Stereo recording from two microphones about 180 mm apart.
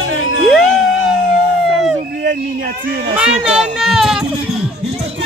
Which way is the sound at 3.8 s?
Centre (ahead or behind).